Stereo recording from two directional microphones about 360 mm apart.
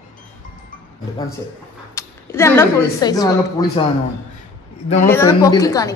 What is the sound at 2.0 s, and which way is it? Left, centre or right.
Speech, centre.